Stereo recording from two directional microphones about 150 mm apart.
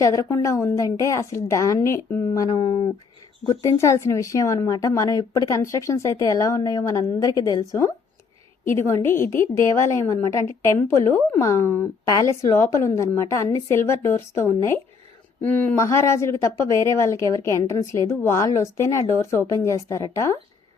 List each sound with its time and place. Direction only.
0.0 s a woman's voice: 20° left (ahead or behind)
3.8 s a woman's voice: 20° left (ahead or behind)